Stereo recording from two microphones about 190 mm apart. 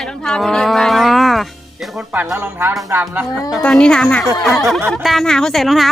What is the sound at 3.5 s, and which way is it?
A woman's voice, 5° left (ahead or behind).